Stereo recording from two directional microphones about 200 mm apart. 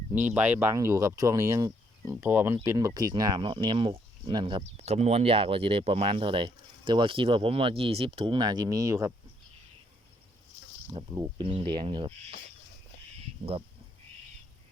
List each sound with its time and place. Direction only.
0.3 s speech: 10° right (ahead or behind)
10.9 s speech: 20° right (ahead or behind)